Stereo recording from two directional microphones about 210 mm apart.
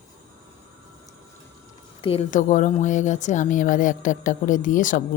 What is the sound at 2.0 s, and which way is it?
Speech, 25° left (ahead or behind).